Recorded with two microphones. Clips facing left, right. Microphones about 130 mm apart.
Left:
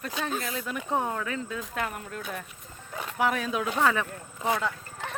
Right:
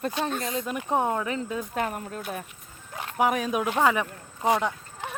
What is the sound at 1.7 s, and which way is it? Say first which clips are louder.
Speech: right 3 dB; 35° right (ahead or behind).